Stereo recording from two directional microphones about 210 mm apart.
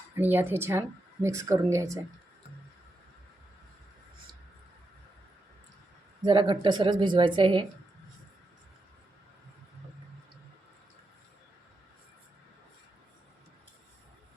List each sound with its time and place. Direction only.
0.2 s speech: 10° right (ahead or behind)
6.2 s a woman's voice: 25° right (ahead or behind)